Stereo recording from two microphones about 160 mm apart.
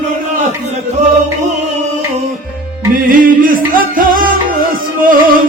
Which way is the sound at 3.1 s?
60° right (ahead or behind).